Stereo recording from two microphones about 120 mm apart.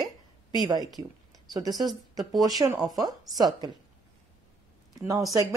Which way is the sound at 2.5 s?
30° right (ahead or behind).